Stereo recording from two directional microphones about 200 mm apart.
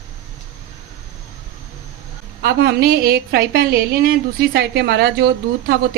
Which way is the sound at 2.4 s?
50° right (ahead or behind).